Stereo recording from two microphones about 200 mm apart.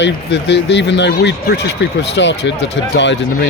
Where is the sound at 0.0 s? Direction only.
60° left (ahead or behind).